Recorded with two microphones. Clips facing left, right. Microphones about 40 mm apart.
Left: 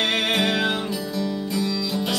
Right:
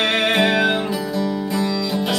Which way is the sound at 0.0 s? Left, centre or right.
Centre.